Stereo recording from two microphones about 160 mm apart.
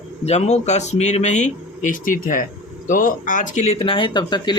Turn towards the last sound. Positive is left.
turn(degrees=30)  # may be behind; listen again after turning